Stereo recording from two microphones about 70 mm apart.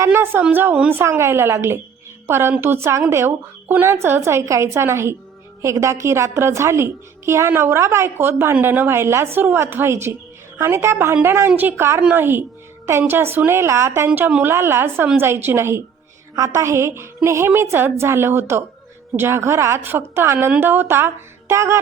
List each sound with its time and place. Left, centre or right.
0.1 s a woman's voice: right
1.0 s speech: right
11.1 s a woman's voice: right
14.2 s a woman's voice: centre
14.4 s speech: right